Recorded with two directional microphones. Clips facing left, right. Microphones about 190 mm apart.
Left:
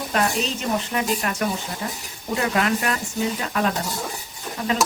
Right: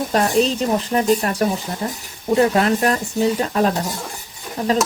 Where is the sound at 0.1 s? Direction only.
35° right (ahead or behind).